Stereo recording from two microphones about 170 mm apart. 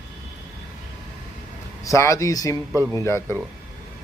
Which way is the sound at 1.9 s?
20° left (ahead or behind).